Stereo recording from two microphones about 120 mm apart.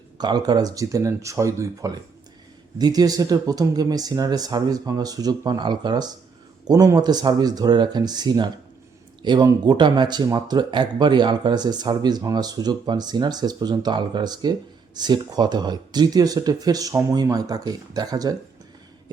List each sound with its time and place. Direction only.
0.2 s speech: 35° right (ahead or behind)